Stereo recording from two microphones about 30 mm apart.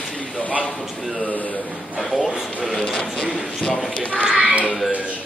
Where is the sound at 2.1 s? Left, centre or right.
Centre.